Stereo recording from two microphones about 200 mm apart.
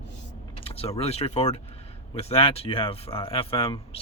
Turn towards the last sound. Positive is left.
turn(degrees=30)  # may be behind; listen again after turning